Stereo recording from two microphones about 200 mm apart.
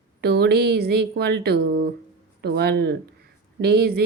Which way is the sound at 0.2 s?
55° right (ahead or behind).